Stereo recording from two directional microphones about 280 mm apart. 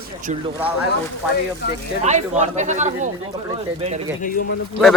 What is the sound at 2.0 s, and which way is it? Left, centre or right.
Speech, right.